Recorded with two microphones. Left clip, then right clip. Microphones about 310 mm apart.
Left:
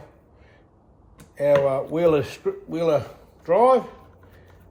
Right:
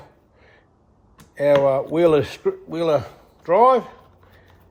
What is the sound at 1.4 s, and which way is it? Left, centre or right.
Speech, right.